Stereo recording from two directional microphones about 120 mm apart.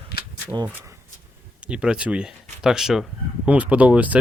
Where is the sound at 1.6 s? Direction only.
10° right (ahead or behind).